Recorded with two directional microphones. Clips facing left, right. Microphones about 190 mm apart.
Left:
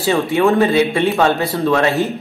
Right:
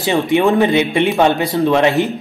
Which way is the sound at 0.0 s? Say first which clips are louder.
Right 1 dB; 15° right (ahead or behind).